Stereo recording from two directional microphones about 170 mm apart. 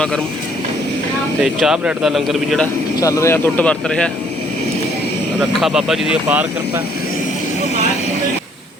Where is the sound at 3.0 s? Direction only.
20° left (ahead or behind).